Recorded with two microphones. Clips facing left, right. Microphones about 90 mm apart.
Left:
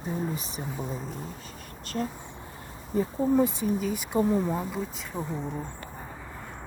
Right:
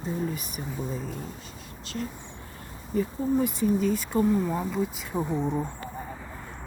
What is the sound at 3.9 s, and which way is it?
Speech, 20° left (ahead or behind).